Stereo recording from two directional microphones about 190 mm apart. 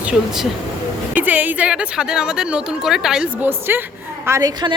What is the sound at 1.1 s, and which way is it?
A woman's voice, 10° right (ahead or behind).